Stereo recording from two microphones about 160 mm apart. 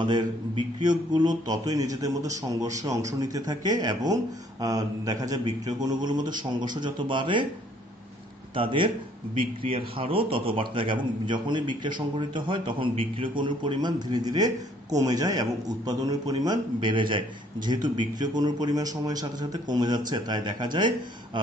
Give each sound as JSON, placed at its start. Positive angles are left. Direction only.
{"t": 0.0, "sound": "speech", "side_deg": -30}
{"t": 8.5, "sound": "a man's voice", "side_deg": -30}